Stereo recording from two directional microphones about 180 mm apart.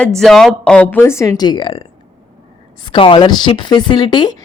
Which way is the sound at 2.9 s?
25° left (ahead or behind).